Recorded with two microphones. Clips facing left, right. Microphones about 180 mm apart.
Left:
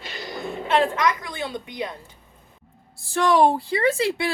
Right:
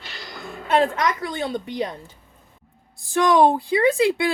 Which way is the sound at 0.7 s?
35° right (ahead or behind).